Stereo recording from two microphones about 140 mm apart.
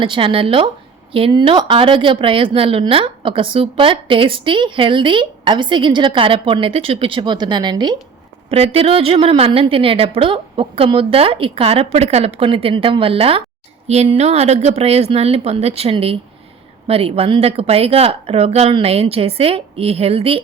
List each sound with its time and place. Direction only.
0.0 s a woman's voice: 40° right (ahead or behind)
8.4 s a woman's voice: 45° right (ahead or behind)